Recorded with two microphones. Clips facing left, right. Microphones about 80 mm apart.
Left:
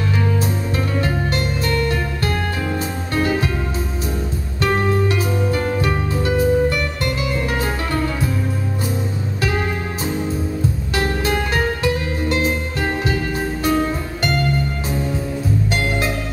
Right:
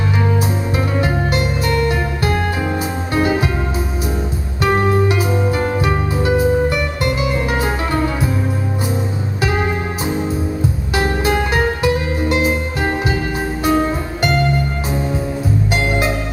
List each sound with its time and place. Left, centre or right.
0.4 s music: centre
4.6 s music: right
9.4 s music: right
13.7 s music: right
15.7 s music: right